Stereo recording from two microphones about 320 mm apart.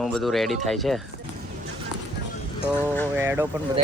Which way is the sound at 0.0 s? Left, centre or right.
Centre.